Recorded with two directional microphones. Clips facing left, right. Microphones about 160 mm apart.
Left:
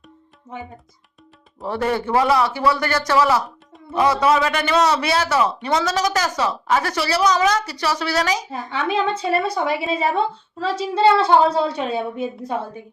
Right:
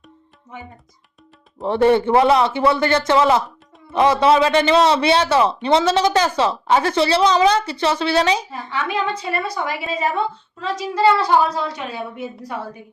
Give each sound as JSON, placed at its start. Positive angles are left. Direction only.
{"t": 1.5, "sound": "a woman's voice", "side_deg": -25}
{"t": 8.4, "sound": "a woman's voice", "side_deg": 25}